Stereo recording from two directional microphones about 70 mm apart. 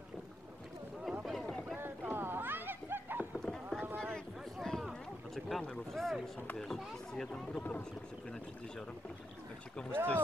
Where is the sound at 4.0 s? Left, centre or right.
Centre.